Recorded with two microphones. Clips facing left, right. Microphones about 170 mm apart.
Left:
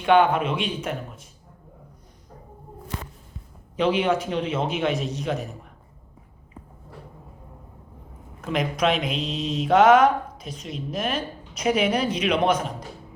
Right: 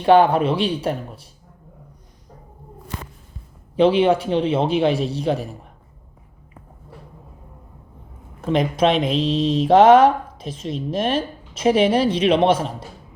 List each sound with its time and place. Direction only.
0.0 s speech: 35° right (ahead or behind)
3.8 s speech: 30° right (ahead or behind)
8.4 s speech: 30° right (ahead or behind)